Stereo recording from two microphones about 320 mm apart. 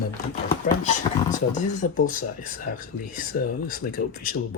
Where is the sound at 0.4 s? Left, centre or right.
Left.